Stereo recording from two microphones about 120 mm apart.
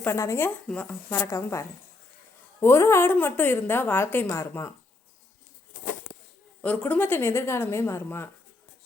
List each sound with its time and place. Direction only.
0.0 s a woman's voice: 20° left (ahead or behind)
1.1 s a woman's voice: 25° left (ahead or behind)
6.6 s a woman's voice: 10° left (ahead or behind)